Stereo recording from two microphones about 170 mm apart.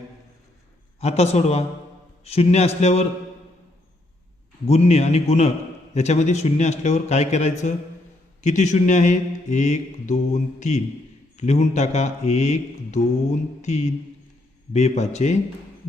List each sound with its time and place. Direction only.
0.9 s speech: 40° left (ahead or behind)
4.6 s speech: 40° left (ahead or behind)
8.4 s mantra: 45° left (ahead or behind)
11.3 s speech: 40° left (ahead or behind)